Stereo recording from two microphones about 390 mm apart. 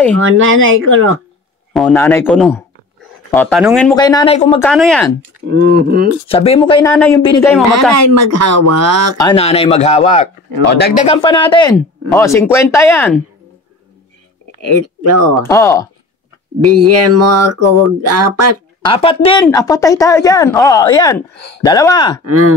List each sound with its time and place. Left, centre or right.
0.2 s speech: right
1.7 s speech: centre
4.6 s speech: centre
5.5 s speech: right
6.2 s speech: centre
7.9 s speech: right
9.2 s speech: centre
14.6 s speech: right
15.3 s speech: centre
16.6 s speech: right
18.9 s speech: centre
22.2 s speech: right